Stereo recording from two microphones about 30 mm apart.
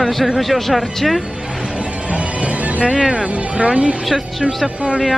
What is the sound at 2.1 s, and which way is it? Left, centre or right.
Music, right.